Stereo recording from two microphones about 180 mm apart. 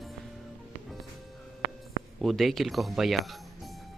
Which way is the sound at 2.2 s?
Centre (ahead or behind).